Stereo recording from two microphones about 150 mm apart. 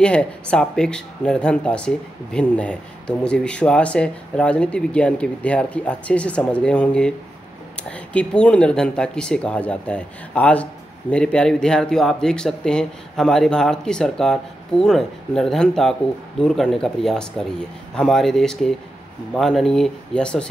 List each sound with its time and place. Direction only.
0.0 s speech: 5° left (ahead or behind)